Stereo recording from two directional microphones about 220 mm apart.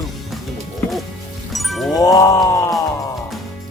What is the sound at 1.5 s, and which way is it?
Music, centre (ahead or behind).